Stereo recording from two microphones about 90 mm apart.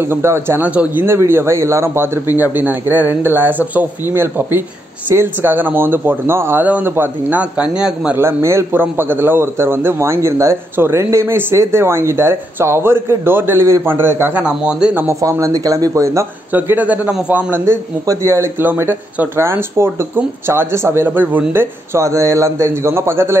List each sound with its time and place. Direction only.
0.0 s a man's voice: 25° right (ahead or behind)
0.7 s a man's voice: 15° right (ahead or behind)
1.0 s a man's voice: 30° right (ahead or behind); by 8.2 s 10° right (ahead or behind)
8.2 s a man's voice: 30° right (ahead or behind)
14.3 s a man's voice: 10° right (ahead or behind)
15.0 s a man's voice: 35° right (ahead or behind)
16.5 s a man's voice: 20° right (ahead or behind)
17.6 s a man's voice: 30° right (ahead or behind)
18.7 s a man's voice: 20° right (ahead or behind)
21.9 s a man's voice: 35° right (ahead or behind)